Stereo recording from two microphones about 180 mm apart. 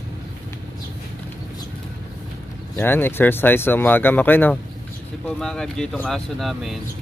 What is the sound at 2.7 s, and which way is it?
Speech, 10° left (ahead or behind).